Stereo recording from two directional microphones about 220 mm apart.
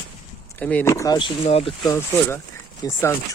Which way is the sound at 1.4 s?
25° left (ahead or behind).